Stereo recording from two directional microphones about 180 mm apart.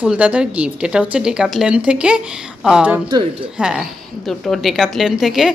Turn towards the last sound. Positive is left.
turn(degrees=0)  # may be behind; listen again after turning